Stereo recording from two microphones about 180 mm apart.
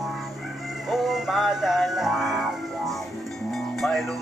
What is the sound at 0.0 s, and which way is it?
Music, centre (ahead or behind).